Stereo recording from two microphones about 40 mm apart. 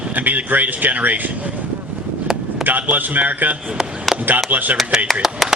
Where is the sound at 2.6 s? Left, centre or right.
Right.